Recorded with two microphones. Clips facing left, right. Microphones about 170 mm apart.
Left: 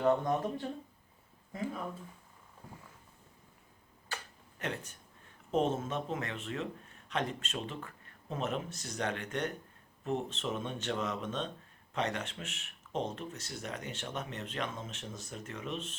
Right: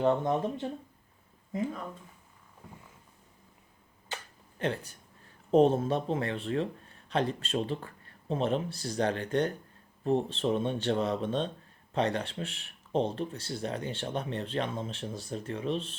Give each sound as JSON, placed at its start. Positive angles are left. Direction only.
{"t": 0.0, "sound": "speech", "side_deg": -20}
{"t": 4.1, "sound": "a sound", "side_deg": -30}
{"t": 5.5, "sound": "speech", "side_deg": -35}